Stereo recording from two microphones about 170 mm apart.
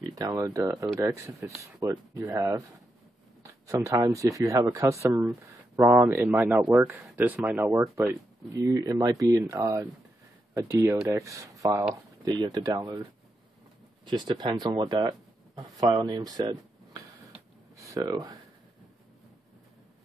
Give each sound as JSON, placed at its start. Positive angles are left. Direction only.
{"t": 0.1, "sound": "speech", "side_deg": -20}
{"t": 14.0, "sound": "speech", "side_deg": -25}